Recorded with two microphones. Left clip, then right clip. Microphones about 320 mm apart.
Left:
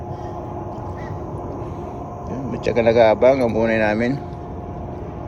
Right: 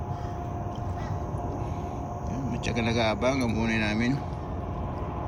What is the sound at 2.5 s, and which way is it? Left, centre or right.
Speech, centre.